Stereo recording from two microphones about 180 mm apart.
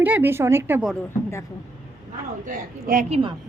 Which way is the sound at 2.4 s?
50° right (ahead or behind).